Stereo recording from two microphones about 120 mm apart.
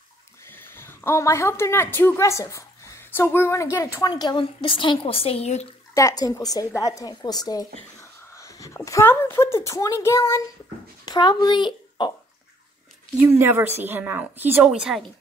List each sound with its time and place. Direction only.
0.5 s speech: 20° left (ahead or behind); by 5.7 s 60° left (ahead or behind)
5.9 s a woman's voice: 30° left (ahead or behind)
11.1 s a child's voice: 35° left (ahead or behind)
13.2 s speech: 20° right (ahead or behind)